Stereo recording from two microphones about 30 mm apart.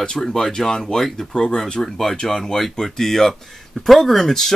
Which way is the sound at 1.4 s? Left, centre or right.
Left.